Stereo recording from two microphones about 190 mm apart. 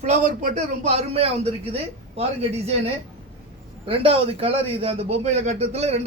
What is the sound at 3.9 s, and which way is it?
A man's voice, 30° right (ahead or behind).